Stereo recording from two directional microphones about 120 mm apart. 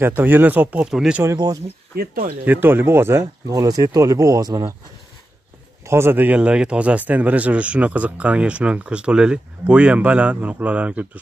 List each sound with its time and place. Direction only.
0.0 s speech: 15° right (ahead or behind)
1.2 s speech: 30° right (ahead or behind)
2.4 s speech: 15° right (ahead or behind)
3.5 s speech: 30° right (ahead or behind)
5.9 s speech: 20° right (ahead or behind)